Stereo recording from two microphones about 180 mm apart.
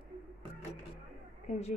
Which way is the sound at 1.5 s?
35° left (ahead or behind).